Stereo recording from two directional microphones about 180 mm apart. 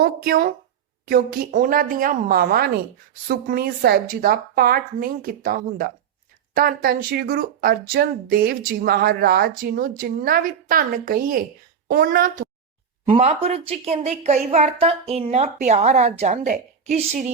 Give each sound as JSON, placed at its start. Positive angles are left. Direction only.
{"t": 0.0, "sound": "a woman's voice", "side_deg": -55}
{"t": 13.1, "sound": "a woman's voice", "side_deg": -35}